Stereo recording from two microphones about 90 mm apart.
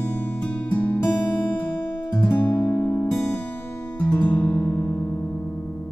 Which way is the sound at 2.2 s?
20° left (ahead or behind).